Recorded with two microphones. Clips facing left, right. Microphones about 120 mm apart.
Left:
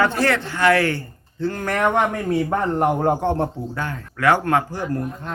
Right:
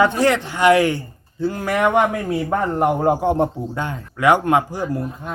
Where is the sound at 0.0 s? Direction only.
15° right (ahead or behind).